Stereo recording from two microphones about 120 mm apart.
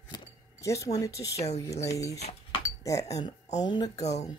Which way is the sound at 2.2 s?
65° left (ahead or behind).